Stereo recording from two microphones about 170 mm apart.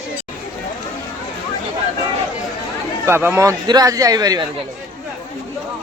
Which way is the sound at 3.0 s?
15° right (ahead or behind).